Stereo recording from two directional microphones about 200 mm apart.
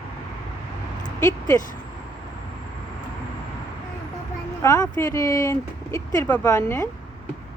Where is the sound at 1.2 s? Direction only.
15° left (ahead or behind).